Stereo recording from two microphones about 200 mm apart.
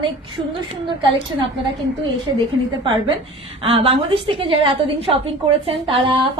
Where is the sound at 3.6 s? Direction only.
30° right (ahead or behind).